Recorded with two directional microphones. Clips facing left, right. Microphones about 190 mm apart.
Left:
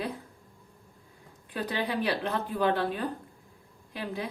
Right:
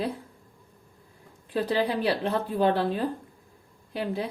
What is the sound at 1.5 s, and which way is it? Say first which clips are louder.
Speech: right 5 dB; 30° right (ahead or behind).